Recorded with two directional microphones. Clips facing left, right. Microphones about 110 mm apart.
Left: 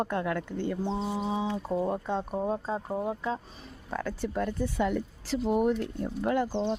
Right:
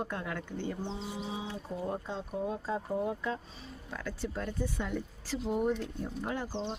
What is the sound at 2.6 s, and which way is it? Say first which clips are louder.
Speech: left 2 dB; 30° left (ahead or behind).